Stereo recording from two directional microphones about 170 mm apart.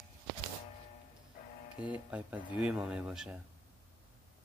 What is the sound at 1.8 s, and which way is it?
Speech, 10° right (ahead or behind).